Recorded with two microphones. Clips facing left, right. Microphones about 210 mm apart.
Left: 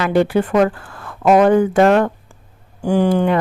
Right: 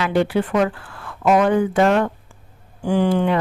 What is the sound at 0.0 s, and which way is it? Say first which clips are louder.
Speech: left 3 dB; 50° left (ahead or behind).